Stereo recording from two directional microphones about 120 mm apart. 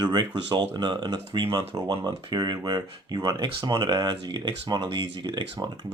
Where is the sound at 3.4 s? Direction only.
40° right (ahead or behind).